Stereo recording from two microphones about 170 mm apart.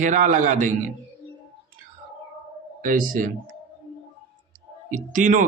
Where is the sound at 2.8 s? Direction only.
55° right (ahead or behind).